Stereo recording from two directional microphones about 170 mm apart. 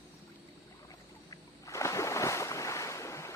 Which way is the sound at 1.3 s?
20° left (ahead or behind).